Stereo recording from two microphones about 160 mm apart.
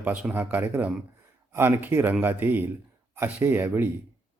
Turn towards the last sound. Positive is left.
turn(degrees=-15)  # may be behind; listen again after turning